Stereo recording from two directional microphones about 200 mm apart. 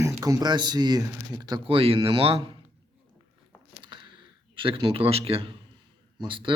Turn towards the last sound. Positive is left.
turn(degrees=-25)  # may be behind; listen again after turning